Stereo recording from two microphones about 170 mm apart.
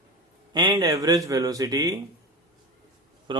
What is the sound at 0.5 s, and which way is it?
A man's voice, 25° right (ahead or behind).